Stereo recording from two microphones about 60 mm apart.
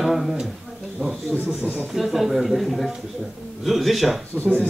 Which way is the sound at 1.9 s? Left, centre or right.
Centre.